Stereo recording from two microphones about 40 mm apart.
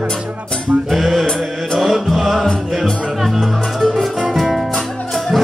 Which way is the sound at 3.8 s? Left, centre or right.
Centre.